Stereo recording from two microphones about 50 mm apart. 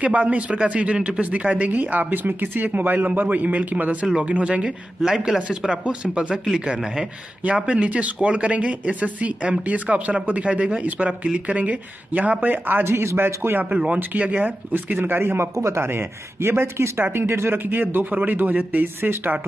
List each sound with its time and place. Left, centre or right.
0.0 s a man's voice: right
5.0 s speech: centre
5.7 s a man's voice: right
12.8 s a man's voice: right
13.7 s a man's voice: right
15.0 s speech: right
15.8 s speech: right
17.1 s a man's voice: right
18.9 s a man's voice: right